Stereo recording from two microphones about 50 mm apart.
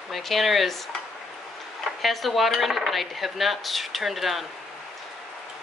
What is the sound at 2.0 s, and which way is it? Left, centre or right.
Cutlery, centre.